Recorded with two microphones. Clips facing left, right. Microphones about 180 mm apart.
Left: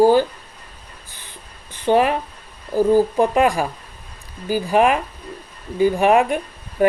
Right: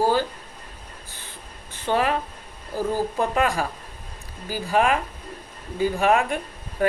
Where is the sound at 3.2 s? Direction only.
15° left (ahead or behind).